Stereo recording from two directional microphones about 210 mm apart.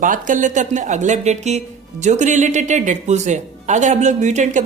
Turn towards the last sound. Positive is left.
turn(degrees=-35)  # may be behind; listen again after turning